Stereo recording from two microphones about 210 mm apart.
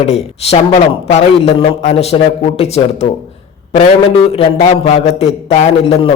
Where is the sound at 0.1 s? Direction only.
30° left (ahead or behind).